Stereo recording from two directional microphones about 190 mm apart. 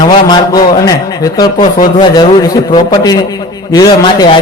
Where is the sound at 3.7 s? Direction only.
20° left (ahead or behind).